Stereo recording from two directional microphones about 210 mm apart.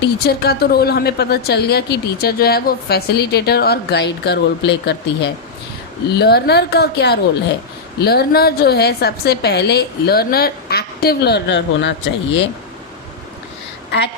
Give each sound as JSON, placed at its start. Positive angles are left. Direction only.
{"t": 0.0, "sound": "a woman's voice", "side_deg": 50}